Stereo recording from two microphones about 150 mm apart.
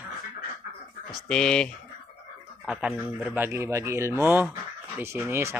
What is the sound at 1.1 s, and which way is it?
Speech, 5° left (ahead or behind).